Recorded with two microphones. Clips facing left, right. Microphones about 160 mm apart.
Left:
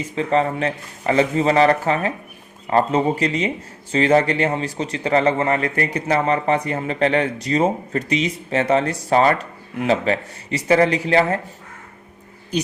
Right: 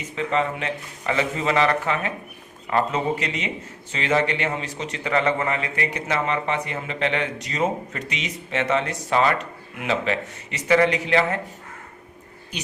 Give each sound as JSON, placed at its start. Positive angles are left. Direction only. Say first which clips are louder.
{"t": 0.2, "sound": "speech", "louder": "left 5 dB", "side_deg": 40}